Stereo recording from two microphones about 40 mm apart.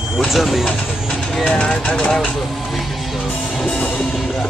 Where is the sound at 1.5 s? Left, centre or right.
Left.